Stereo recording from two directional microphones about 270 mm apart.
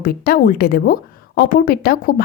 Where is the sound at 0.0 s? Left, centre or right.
Left.